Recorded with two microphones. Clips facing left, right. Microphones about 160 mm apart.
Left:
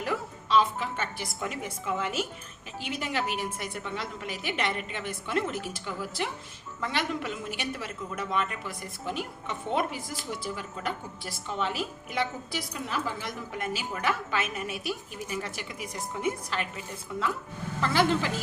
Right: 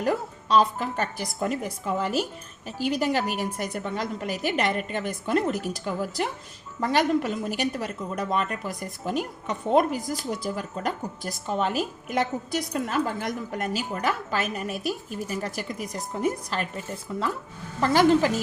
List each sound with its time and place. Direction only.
0.0 s a woman's voice: 40° right (ahead or behind)